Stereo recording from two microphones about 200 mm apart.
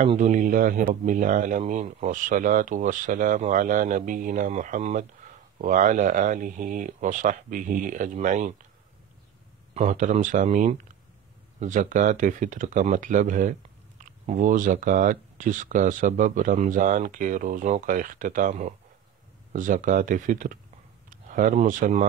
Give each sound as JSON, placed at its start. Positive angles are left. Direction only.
{"t": 0.0, "sound": "speech", "side_deg": -35}
{"t": 9.8, "sound": "speech", "side_deg": -40}